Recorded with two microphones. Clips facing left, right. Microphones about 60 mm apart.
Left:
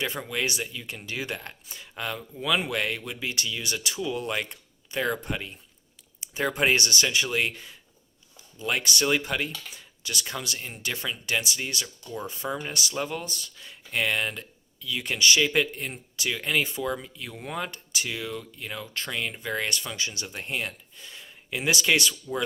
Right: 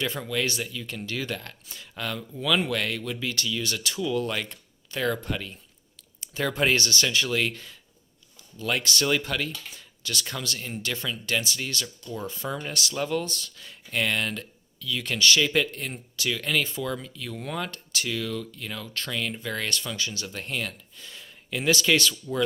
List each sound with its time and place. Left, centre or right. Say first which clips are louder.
0.0 s speech: right 1 dB; centre
6.1 s a sound: left 1 dB; centre
6.7 s speech: even; centre